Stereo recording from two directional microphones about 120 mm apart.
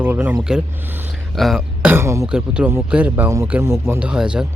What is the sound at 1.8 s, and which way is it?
Speech, 20° right (ahead or behind).